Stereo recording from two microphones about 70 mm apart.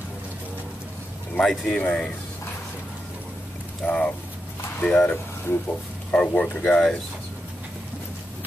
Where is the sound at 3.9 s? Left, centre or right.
Centre.